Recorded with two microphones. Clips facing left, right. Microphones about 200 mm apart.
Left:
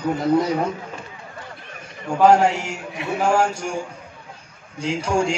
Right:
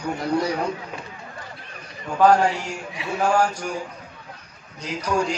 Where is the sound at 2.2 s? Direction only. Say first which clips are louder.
Left 2 dB; 25° left (ahead or behind).